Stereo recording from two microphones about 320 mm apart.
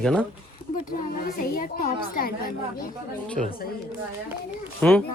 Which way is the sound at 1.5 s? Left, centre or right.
Left.